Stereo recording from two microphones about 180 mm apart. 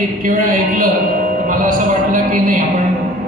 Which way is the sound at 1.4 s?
50° right (ahead or behind).